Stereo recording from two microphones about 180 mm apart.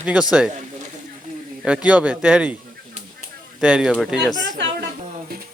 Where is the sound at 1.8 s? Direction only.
5° right (ahead or behind).